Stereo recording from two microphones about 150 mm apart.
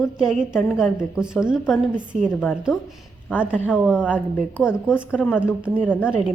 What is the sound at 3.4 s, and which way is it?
A woman's voice, 10° right (ahead or behind).